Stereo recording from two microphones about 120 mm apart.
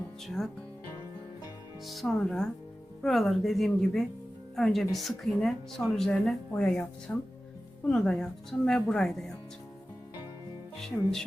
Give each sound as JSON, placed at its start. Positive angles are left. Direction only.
{"t": 0.3, "sound": "speech", "side_deg": 0}
{"t": 1.9, "sound": "speech", "side_deg": 0}
{"t": 10.8, "sound": "speech", "side_deg": 5}